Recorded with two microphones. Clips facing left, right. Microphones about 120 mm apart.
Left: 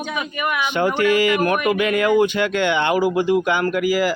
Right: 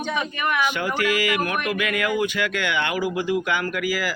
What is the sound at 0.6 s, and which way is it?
A man's voice, 25° left (ahead or behind).